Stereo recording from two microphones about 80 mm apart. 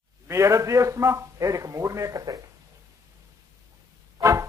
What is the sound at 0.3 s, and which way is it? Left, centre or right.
A man's voice, right.